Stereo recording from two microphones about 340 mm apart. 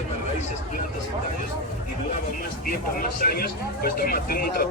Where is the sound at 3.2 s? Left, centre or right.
Left.